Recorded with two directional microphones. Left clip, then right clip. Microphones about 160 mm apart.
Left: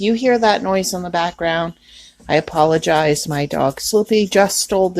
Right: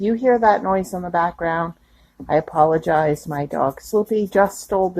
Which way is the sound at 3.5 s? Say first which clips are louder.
Left 3 dB; 55° left (ahead or behind).